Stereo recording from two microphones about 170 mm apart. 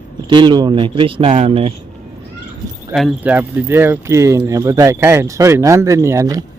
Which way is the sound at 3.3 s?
15° right (ahead or behind).